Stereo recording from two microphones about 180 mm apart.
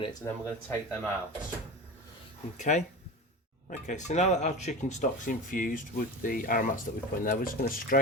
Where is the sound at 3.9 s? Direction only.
40° left (ahead or behind).